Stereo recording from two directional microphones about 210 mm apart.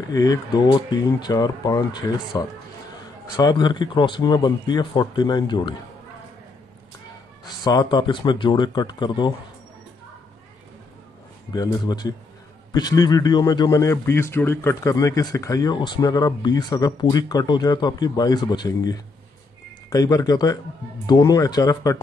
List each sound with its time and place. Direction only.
0.1 s speech: 15° left (ahead or behind)
7.4 s speech: 20° left (ahead or behind)
11.5 s speech: 20° left (ahead or behind)